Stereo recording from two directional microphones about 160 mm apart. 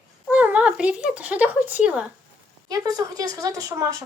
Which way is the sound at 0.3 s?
10° right (ahead or behind).